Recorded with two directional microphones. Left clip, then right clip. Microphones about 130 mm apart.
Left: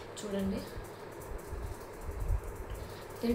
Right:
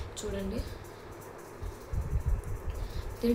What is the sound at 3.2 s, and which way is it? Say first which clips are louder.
Speech: right 4 dB; 30° right (ahead or behind).